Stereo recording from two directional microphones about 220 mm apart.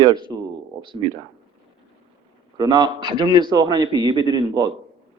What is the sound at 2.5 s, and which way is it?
Speech, 20° right (ahead or behind).